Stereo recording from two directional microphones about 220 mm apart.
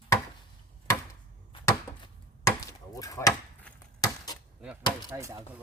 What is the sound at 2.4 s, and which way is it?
Chop, 15° left (ahead or behind).